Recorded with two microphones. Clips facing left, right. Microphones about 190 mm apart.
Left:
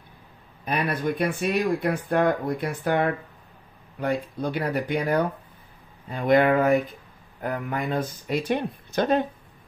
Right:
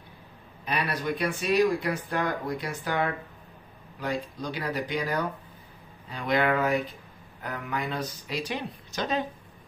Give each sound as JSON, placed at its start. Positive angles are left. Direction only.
{"t": 0.7, "sound": "speech", "side_deg": 50}